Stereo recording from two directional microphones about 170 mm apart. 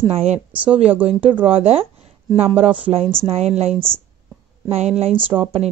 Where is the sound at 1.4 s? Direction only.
35° right (ahead or behind).